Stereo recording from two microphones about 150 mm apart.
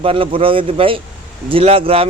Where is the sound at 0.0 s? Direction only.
35° right (ahead or behind).